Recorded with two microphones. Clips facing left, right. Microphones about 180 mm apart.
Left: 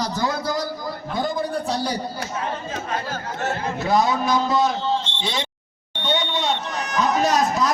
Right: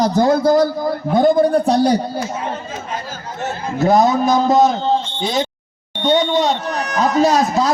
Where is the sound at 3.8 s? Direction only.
45° right (ahead or behind).